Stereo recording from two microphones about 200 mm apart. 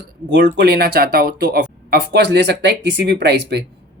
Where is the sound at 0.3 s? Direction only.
60° right (ahead or behind).